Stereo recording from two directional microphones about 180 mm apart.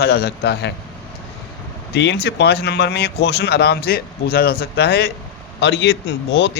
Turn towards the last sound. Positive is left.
turn(degrees=75)  # may be behind; listen again after turning